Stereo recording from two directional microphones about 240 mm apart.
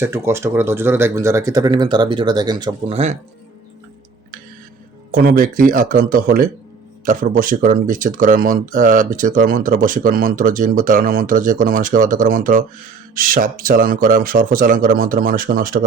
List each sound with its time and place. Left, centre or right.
0.0 s speech: centre; by 3.2 s right
5.1 s speech: right